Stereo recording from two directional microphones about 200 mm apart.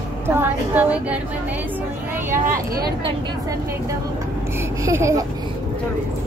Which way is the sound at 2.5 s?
45° right (ahead or behind).